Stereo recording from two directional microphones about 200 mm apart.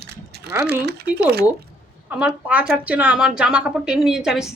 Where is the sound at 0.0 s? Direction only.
55° right (ahead or behind).